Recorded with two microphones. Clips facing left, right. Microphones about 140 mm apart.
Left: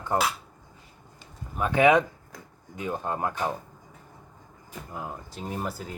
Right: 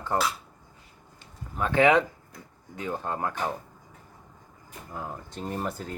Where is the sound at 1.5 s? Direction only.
15° left (ahead or behind).